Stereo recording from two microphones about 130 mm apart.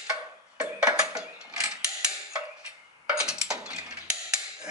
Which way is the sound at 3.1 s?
5° right (ahead or behind).